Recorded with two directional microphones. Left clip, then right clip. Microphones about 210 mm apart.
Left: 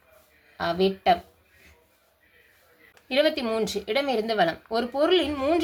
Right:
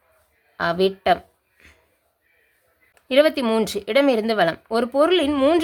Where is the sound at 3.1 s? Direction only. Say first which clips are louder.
Right 6 dB; 40° right (ahead or behind).